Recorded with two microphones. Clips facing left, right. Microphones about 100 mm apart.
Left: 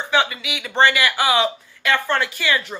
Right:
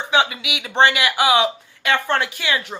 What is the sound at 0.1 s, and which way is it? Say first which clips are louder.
A man's voice: right 1 dB; 20° right (ahead or behind).